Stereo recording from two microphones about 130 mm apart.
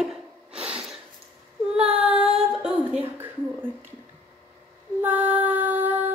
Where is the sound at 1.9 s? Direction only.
10° right (ahead or behind).